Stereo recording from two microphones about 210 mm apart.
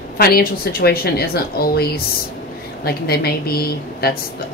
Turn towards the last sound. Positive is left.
turn(degrees=50)  # may be behind; listen again after turning